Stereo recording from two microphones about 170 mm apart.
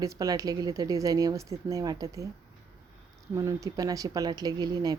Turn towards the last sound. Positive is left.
turn(degrees=-25)  # may be behind; listen again after turning